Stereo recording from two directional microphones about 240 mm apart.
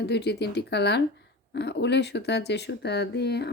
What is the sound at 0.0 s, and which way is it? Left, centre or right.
Speech, left.